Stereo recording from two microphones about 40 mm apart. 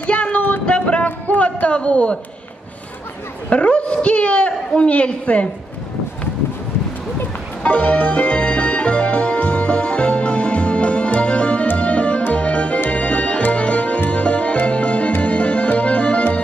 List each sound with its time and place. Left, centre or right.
0.0 s a sound: left
3.4 s a man's voice: left
7.6 s music: left